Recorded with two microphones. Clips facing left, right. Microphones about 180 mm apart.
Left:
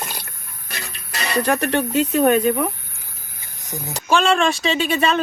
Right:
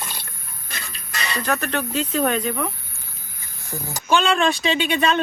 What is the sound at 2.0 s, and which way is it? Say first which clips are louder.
Speech: left 7 dB; 10° left (ahead or behind).